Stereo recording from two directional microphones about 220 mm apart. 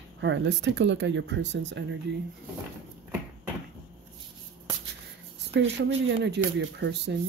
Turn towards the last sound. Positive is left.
turn(degrees=-50)  # may be behind; listen again after turning